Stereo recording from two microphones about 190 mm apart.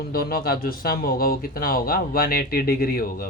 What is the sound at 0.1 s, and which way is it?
Speech, 50° left (ahead or behind).